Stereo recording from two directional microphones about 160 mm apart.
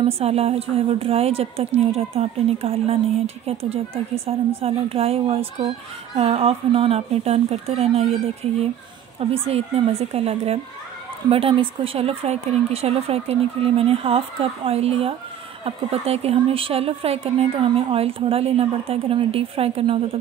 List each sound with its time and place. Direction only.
0.0 s speech: 40° right (ahead or behind)